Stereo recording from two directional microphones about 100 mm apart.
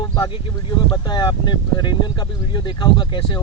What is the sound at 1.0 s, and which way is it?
Speech, 45° left (ahead or behind).